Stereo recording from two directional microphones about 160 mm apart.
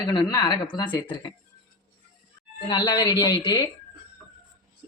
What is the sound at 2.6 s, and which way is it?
Speech, 25° left (ahead or behind).